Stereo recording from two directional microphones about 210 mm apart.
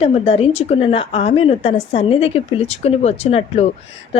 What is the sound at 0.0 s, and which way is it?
A woman's voice, 25° left (ahead or behind).